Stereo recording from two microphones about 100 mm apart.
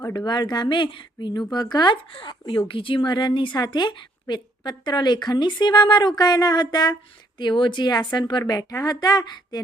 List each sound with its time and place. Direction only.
0.3 s speech: 45° left (ahead or behind)